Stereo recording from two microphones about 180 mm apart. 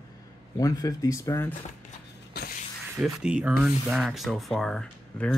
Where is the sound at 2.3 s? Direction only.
65° left (ahead or behind).